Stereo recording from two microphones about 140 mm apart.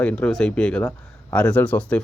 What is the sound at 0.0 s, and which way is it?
Speech, 10° left (ahead or behind).